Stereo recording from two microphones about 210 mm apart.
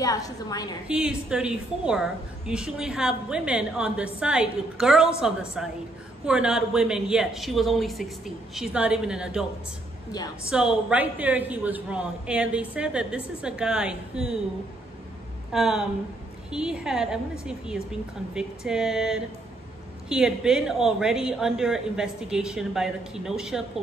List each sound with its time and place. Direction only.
0.0 s a woman's voice: 15° left (ahead or behind)
0.8 s a woman's voice: 5° right (ahead or behind)
10.5 s a woman's voice: 5° right (ahead or behind)
15.5 s a woman's voice: centre (ahead or behind)